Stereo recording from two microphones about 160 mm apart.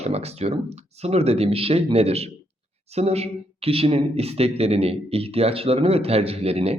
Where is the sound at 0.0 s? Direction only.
40° right (ahead or behind).